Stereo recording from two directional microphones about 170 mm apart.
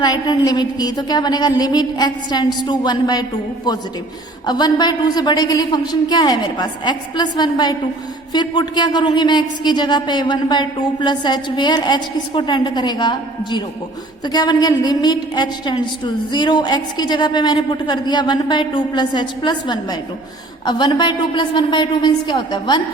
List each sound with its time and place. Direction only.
0.0 s a woman's voice: 25° left (ahead or behind)
4.4 s a woman's voice: 25° left (ahead or behind)